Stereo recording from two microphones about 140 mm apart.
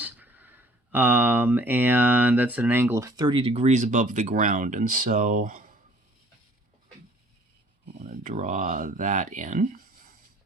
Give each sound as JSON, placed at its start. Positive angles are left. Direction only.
{"t": 0.0, "sound": "speech", "side_deg": -15}
{"t": 3.4, "sound": "speech", "side_deg": -50}
{"t": 7.9, "sound": "speech", "side_deg": -70}